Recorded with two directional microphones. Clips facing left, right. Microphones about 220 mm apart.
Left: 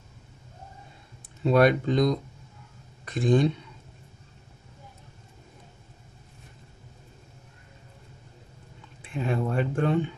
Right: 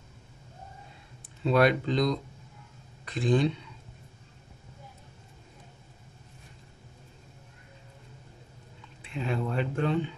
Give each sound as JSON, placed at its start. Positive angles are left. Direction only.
{"t": 1.4, "sound": "speech", "side_deg": 45}
{"t": 9.0, "sound": "speech", "side_deg": 50}